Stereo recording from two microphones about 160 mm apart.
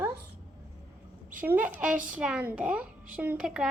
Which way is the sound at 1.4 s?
10° right (ahead or behind).